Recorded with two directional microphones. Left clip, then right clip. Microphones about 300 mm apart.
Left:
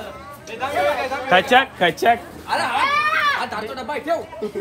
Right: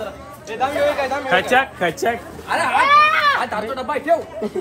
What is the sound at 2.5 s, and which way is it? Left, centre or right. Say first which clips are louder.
A child's voice: right 5 dB; centre.